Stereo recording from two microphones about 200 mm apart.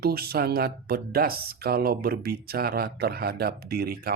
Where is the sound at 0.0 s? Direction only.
50° right (ahead or behind).